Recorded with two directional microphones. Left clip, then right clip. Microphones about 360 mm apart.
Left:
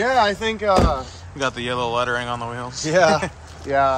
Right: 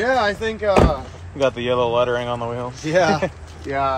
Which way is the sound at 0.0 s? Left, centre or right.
Left.